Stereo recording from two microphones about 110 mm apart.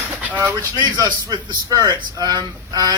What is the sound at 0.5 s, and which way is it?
Speech, 35° right (ahead or behind).